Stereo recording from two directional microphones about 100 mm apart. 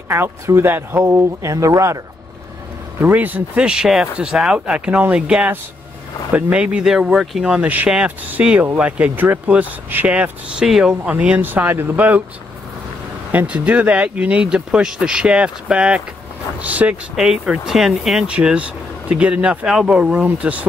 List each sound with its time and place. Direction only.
0.1 s speech: 25° right (ahead or behind)
3.0 s speech: 20° right (ahead or behind)
13.3 s speech: 15° right (ahead or behind)
17.1 s speech: 5° right (ahead or behind)